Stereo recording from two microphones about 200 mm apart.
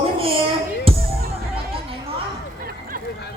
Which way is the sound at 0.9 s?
25° right (ahead or behind).